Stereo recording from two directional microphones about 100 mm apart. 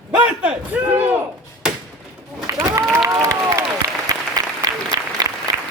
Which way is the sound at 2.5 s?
30° right (ahead or behind).